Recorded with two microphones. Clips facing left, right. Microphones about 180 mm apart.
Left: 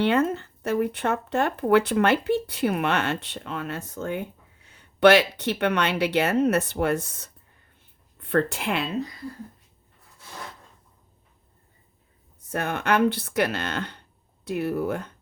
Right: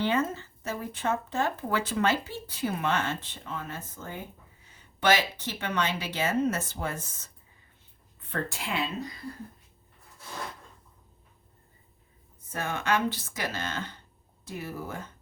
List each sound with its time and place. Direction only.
0.0 s speech: 70° left (ahead or behind)
12.5 s speech: 65° left (ahead or behind)